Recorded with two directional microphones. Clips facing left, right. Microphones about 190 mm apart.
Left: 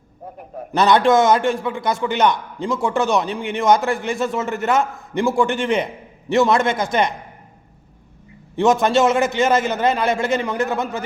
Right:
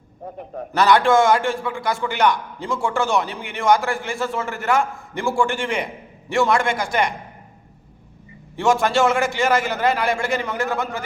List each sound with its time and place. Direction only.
0.7 s a man's voice: 20° left (ahead or behind)
8.5 s a man's voice: 20° left (ahead or behind)